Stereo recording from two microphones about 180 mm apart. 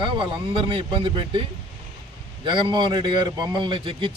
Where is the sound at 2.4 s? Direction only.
25° right (ahead or behind).